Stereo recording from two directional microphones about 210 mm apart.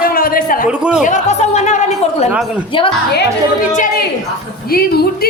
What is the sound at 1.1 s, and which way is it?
A woman's voice, 35° left (ahead or behind).